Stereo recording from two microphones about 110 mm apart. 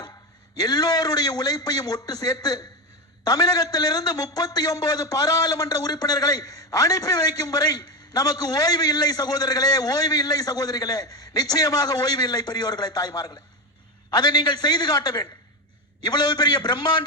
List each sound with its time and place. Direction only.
0.5 s a man's voice: 35° left (ahead or behind)